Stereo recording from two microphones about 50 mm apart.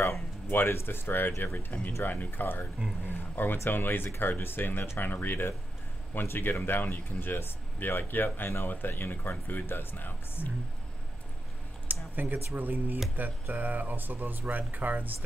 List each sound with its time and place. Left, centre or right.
0.5 s speech: left
11.9 s speech: right